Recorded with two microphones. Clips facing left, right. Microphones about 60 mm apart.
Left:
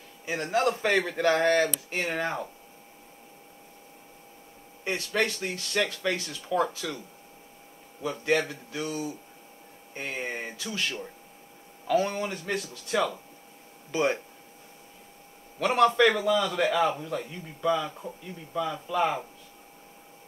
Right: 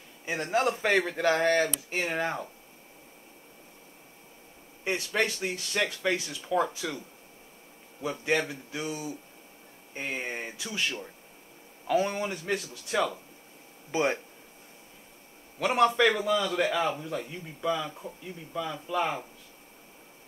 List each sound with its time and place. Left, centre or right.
0.3 s speech: centre
4.8 s speech: centre
8.1 s speech: centre
13.9 s speech: right
15.6 s speech: centre
16.0 s speech: centre